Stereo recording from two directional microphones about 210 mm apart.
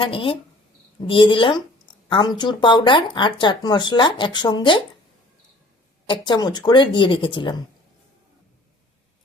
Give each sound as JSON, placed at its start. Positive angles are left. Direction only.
{"t": 0.0, "sound": "speech", "side_deg": 25}
{"t": 6.1, "sound": "speech", "side_deg": 20}